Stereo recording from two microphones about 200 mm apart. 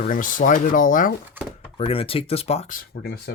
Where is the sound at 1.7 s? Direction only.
30° left (ahead or behind).